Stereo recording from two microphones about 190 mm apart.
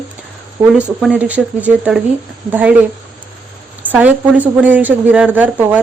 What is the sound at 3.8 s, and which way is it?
Speech, 10° right (ahead or behind).